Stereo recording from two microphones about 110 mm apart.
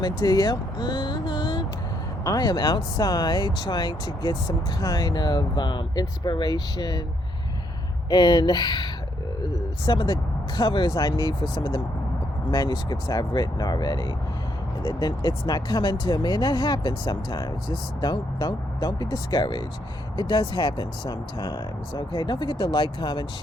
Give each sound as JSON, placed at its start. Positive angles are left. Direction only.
{"t": 0.0, "sound": "speech", "side_deg": 35}
{"t": 8.1, "sound": "speech", "side_deg": 40}